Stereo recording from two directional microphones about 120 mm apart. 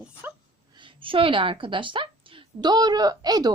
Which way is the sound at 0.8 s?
45° right (ahead or behind).